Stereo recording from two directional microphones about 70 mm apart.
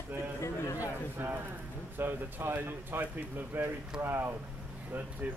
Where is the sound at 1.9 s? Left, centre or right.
Right.